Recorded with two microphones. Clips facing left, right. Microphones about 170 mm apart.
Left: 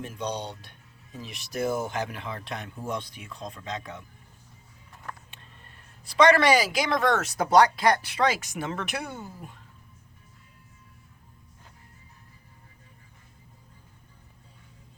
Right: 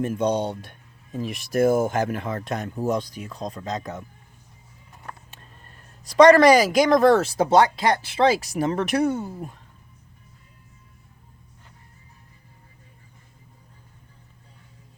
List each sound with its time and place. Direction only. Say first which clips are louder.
0.0 s speech: right 10 dB; 50° right (ahead or behind)
5.3 s speech: right 3 dB; 40° right (ahead or behind)